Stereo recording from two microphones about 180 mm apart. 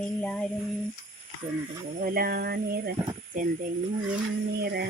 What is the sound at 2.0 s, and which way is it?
Speech, 55° right (ahead or behind).